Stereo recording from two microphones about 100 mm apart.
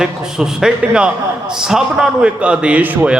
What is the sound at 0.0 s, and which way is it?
A man's voice, 5° right (ahead or behind).